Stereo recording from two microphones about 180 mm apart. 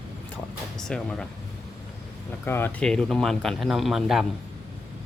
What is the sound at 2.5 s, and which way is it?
Speech, 10° left (ahead or behind).